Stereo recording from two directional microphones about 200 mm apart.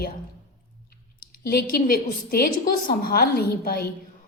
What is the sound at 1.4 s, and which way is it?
A woman's voice, 50° left (ahead or behind).